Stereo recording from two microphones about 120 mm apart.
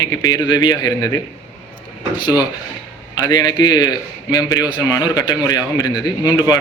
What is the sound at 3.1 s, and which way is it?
A man's voice, 35° left (ahead or behind).